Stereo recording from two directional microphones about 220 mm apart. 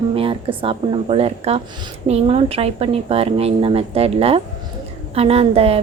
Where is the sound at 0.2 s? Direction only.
25° right (ahead or behind).